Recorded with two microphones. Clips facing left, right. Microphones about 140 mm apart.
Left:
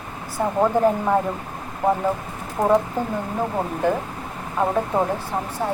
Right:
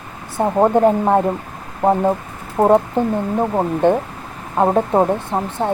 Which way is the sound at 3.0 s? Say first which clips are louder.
Right 7 dB; 20° right (ahead or behind).